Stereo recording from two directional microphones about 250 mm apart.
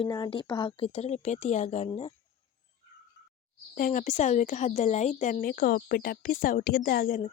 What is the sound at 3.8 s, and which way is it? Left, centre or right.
Speech, left.